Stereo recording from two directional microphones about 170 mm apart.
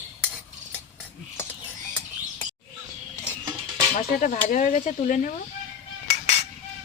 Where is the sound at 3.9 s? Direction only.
45° left (ahead or behind).